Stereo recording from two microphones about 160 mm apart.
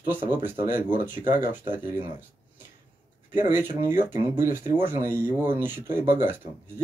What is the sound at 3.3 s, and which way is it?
Speech, 15° right (ahead or behind).